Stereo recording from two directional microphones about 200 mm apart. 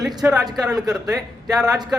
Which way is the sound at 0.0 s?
20° right (ahead or behind).